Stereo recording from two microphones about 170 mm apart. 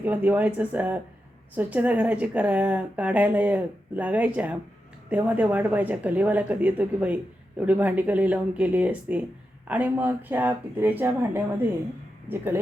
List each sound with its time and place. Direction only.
0.0 s a woman's voice: 10° right (ahead or behind)